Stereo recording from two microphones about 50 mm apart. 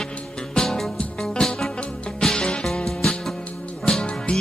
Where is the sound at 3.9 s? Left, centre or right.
Centre.